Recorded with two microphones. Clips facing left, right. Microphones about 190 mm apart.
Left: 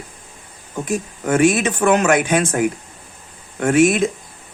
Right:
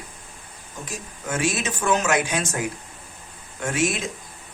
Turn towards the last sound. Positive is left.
turn(degrees=55)  # may be behind; listen again after turning